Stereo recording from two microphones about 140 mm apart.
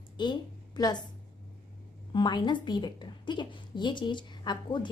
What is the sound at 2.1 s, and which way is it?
A woman's voice, 30° left (ahead or behind).